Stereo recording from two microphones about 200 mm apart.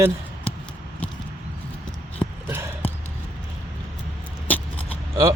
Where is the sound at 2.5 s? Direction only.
10° right (ahead or behind).